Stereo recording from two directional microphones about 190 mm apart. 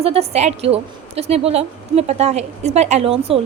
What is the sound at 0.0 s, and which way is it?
A woman's voice, 30° right (ahead or behind).